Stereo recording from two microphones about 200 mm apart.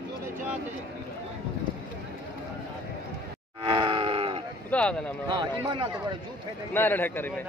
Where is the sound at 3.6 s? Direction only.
25° right (ahead or behind).